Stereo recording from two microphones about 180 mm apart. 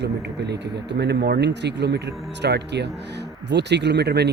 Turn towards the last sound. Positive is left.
turn(degrees=-65)  # may be behind; listen again after turning